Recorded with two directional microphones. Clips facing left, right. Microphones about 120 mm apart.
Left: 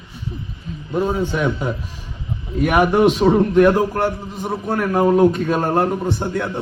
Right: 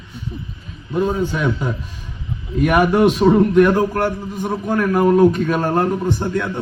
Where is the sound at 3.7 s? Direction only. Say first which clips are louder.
Right 1 dB; 25° left (ahead or behind).